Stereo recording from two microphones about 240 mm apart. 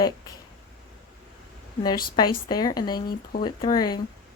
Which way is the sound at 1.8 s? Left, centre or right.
Centre.